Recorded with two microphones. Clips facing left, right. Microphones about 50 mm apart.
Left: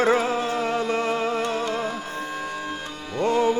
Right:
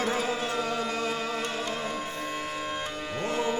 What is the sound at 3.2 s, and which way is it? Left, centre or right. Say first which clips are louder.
Music: left 9 dB; left.